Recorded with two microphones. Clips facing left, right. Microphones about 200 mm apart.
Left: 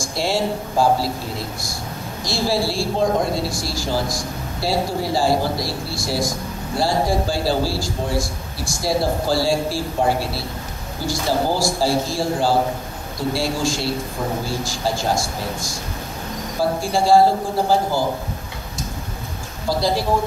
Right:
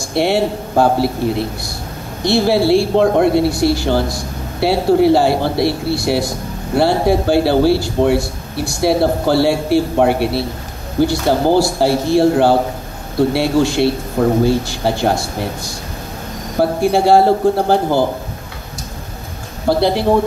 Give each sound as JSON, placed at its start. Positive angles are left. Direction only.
{"t": 0.0, "sound": "a man's voice", "side_deg": -60}
{"t": 19.7, "sound": "a man's voice", "side_deg": -60}